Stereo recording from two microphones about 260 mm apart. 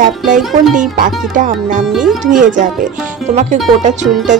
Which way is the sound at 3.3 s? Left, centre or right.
Right.